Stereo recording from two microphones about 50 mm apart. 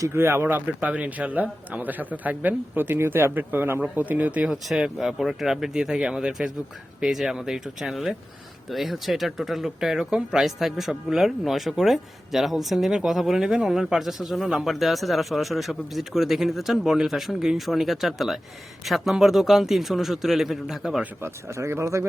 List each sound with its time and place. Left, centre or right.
0.0 s speech: right
0.9 s speech: right
3.9 s speech: right
4.5 s speech: centre
21.5 s speech: right